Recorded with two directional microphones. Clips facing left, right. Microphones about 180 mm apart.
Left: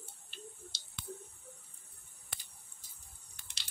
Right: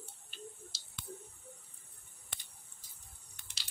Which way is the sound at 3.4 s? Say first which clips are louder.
Even; centre (ahead or behind).